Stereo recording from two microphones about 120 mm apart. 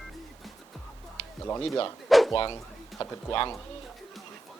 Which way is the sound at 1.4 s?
20° left (ahead or behind).